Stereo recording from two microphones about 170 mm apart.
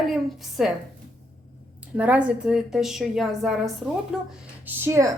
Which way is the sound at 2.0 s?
5° right (ahead or behind).